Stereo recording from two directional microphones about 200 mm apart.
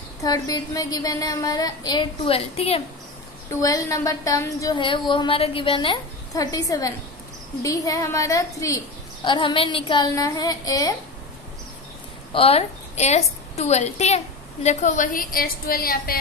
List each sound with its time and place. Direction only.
0.2 s a woman's voice: 15° left (ahead or behind)
3.6 s a woman's voice: 15° left (ahead or behind)
12.3 s a woman's voice: 30° left (ahead or behind); by 16.2 s 50° left (ahead or behind)